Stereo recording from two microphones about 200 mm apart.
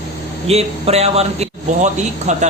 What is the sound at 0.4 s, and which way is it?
Speech, 30° right (ahead or behind).